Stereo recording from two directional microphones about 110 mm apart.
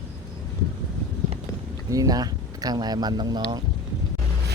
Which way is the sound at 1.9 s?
35° right (ahead or behind).